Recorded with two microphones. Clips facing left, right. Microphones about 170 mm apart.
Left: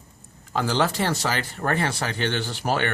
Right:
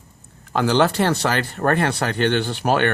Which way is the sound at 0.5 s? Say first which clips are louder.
Right 6 dB; 65° right (ahead or behind).